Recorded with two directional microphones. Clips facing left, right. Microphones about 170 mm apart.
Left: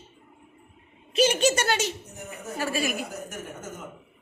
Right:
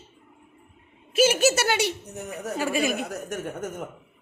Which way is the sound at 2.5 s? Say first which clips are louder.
Right 3 dB; 15° right (ahead or behind).